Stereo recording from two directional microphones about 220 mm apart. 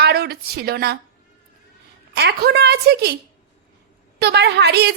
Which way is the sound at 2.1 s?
45° right (ahead or behind).